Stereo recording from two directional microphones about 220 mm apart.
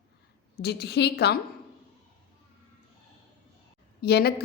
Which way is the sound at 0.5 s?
45° left (ahead or behind).